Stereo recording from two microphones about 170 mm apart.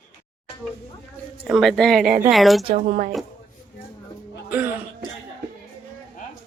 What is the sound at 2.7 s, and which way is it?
Speech, 50° right (ahead or behind).